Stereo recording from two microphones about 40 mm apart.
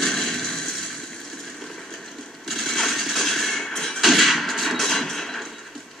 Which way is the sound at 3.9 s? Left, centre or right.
Centre.